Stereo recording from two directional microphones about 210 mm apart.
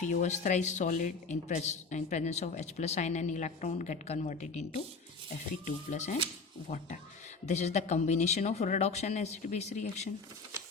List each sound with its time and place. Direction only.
0.0 s speech: 35° left (ahead or behind)
5.6 s speech: 35° left (ahead or behind)